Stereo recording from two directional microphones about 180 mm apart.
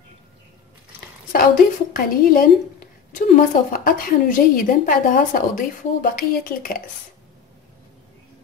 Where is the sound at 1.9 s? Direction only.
50° left (ahead or behind).